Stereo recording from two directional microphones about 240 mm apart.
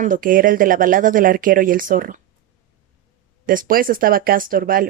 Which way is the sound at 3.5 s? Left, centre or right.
Right.